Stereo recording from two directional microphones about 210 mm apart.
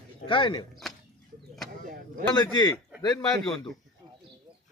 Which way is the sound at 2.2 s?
20° left (ahead or behind).